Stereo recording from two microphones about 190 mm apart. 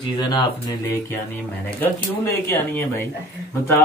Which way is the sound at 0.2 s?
20° left (ahead or behind).